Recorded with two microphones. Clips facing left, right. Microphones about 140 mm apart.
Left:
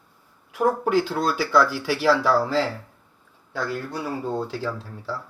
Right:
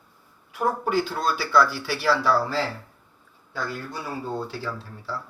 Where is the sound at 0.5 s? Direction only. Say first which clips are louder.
Left 3 dB; 90° left.